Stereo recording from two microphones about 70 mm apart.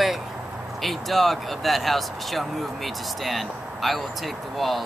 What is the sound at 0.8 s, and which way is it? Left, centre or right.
Speech, centre.